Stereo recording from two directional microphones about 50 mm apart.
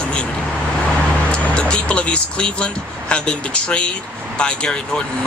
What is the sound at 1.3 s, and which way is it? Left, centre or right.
Vehicle, left.